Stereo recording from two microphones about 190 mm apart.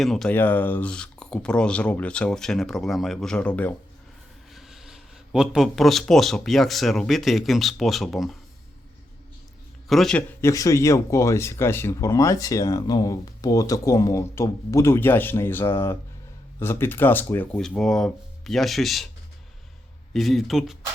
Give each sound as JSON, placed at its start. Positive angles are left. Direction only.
{"t": 0.0, "sound": "speech", "side_deg": 0}
{"t": 9.9, "sound": "speech", "side_deg": 0}
{"t": 20.1, "sound": "speech", "side_deg": 0}